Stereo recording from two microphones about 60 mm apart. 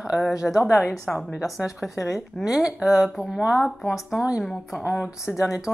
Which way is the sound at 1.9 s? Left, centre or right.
Left.